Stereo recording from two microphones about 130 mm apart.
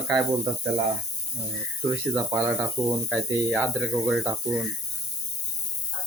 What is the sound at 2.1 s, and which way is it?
Speech, 25° right (ahead or behind).